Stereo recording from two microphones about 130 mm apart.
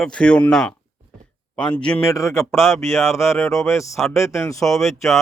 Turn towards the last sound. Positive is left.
turn(degrees=0)  # may be behind; listen again after turning